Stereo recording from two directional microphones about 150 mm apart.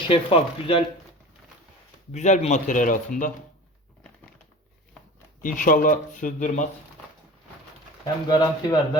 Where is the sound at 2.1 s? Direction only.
50° left (ahead or behind).